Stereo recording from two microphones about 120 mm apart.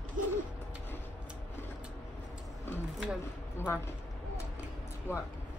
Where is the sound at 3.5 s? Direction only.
20° left (ahead or behind).